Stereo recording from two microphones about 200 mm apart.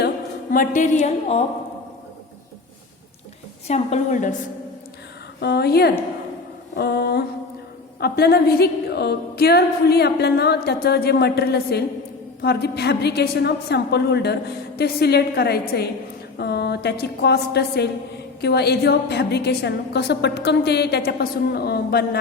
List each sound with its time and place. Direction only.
0.5 s a woman's voice: 40° left (ahead or behind)
3.7 s a woman's voice: 35° left (ahead or behind)
5.4 s a woman's voice: 55° left (ahead or behind)